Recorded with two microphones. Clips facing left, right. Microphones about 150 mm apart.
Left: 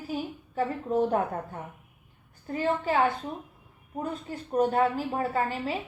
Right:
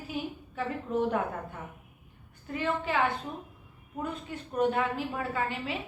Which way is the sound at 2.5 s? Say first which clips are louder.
Left 4 dB; 40° left (ahead or behind).